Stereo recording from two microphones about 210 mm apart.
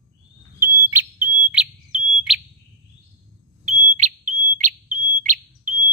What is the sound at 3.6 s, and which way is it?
Smoke detector, 35° right (ahead or behind).